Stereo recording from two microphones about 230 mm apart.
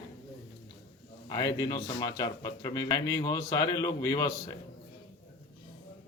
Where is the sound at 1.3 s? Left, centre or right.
Centre.